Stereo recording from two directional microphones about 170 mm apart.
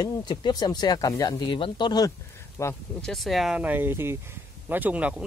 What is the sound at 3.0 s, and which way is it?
Speech, centre (ahead or behind).